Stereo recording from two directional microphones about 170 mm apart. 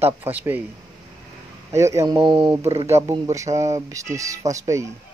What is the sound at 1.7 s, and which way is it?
Speech, 15° right (ahead or behind).